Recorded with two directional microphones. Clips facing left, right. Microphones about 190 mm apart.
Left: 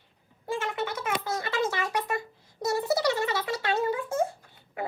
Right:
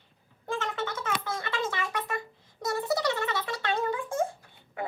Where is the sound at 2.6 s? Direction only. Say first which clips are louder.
Left 2 dB; 25° left (ahead or behind).